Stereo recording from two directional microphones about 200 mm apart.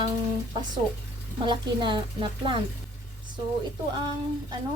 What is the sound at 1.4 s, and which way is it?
A woman's voice, 25° right (ahead or behind).